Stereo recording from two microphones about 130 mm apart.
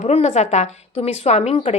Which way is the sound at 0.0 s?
55° left (ahead or behind).